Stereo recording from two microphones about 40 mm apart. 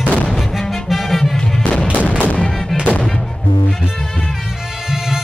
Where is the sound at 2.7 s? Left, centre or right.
Centre.